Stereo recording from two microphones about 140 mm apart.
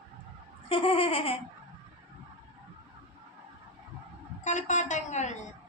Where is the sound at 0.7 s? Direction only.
40° left (ahead or behind).